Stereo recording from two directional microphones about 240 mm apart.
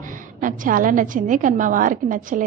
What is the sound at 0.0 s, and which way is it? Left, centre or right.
A woman's voice, right.